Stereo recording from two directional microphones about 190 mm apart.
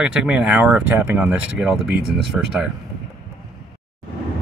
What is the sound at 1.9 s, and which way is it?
Speech, 55° right (ahead or behind).